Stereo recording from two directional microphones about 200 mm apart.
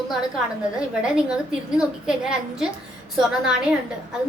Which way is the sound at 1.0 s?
5° right (ahead or behind).